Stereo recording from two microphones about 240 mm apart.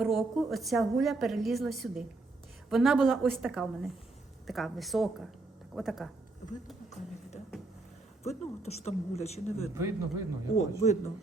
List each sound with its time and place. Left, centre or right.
0.0 s a woman's voice: centre
8.2 s a woman's voice: left
9.7 s speech: centre
10.5 s a woman's voice: left